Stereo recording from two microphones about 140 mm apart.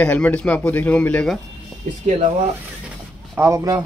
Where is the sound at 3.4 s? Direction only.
20° right (ahead or behind).